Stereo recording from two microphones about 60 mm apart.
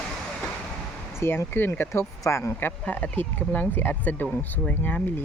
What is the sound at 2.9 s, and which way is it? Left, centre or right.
Speech, left.